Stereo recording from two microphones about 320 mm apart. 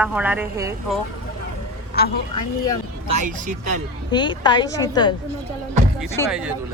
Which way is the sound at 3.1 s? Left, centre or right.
Right.